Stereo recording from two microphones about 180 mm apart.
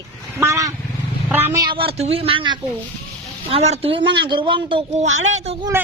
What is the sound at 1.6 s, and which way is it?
A child's voice, 30° right (ahead or behind).